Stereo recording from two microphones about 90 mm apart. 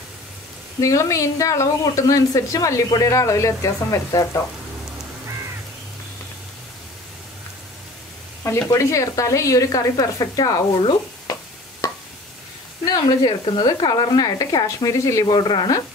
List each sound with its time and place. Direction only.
0.7 s speech: 35° left (ahead or behind)
8.6 s speech: 35° left (ahead or behind)
10.8 s stir: 55° left (ahead or behind)
11.8 s a sound: 40° left (ahead or behind)
12.8 s sizzle: 45° left (ahead or behind)
13.5 s speech: 55° left (ahead or behind); by 15.2 s 35° left (ahead or behind)
15.2 s sizzle: 60° left (ahead or behind)